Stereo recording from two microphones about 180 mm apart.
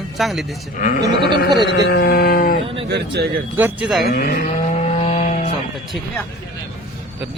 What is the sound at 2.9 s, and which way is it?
Speech, 65° right (ahead or behind).